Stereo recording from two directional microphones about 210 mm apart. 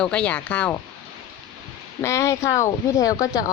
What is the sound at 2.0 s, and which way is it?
A woman's voice, 15° left (ahead or behind).